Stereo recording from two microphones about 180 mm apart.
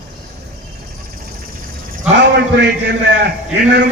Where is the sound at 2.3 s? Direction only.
70° right (ahead or behind).